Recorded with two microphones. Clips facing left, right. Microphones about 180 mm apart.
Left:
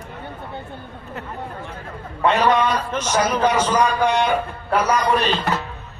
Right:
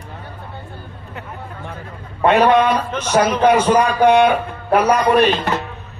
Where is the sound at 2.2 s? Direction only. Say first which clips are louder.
Right 5 dB; 60° right (ahead or behind).